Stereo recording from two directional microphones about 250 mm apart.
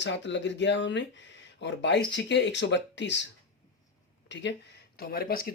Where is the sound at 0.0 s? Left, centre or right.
Left.